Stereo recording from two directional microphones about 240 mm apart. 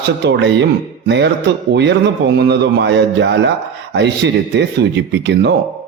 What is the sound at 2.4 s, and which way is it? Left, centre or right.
A man's voice, right.